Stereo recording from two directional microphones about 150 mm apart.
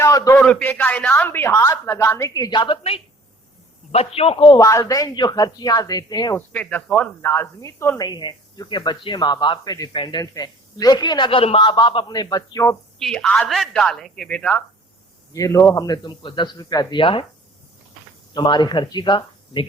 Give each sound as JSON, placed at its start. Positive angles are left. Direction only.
{"t": 0.0, "sound": "a sound", "side_deg": 20}
{"t": 0.3, "sound": "a man's voice", "side_deg": 5}
{"t": 4.6, "sound": "a man's voice", "side_deg": 20}
{"t": 6.5, "sound": "a man's voice", "side_deg": 10}
{"t": 13.0, "sound": "a woman's voice", "side_deg": 5}
{"t": 15.3, "sound": "a man's voice", "side_deg": 20}
{"t": 18.3, "sound": "a man's voice", "side_deg": 30}